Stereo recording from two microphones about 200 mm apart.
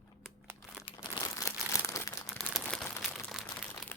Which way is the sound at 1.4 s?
15° left (ahead or behind).